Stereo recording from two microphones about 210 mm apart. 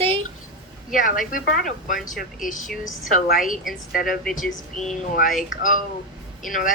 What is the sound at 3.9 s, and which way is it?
Speech, 45° left (ahead or behind).